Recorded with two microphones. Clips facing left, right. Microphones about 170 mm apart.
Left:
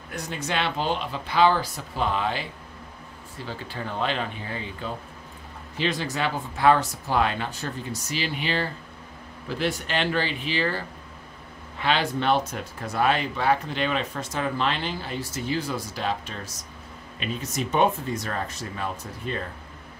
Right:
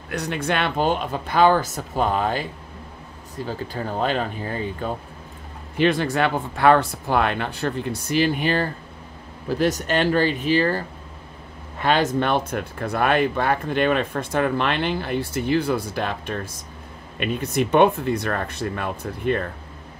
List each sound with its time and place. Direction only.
0.1 s speech: 70° right (ahead or behind); by 10.8 s 45° right (ahead or behind)
11.8 s speech: 45° right (ahead or behind)